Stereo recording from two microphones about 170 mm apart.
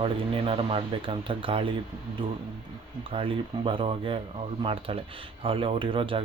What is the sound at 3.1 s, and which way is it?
Speech, 30° right (ahead or behind).